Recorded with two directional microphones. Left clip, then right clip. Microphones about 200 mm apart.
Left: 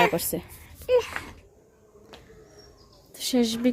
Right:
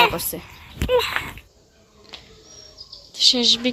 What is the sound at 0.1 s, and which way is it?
Speech, 25° left (ahead or behind).